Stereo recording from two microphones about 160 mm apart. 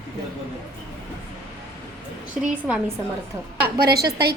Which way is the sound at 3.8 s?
85° right.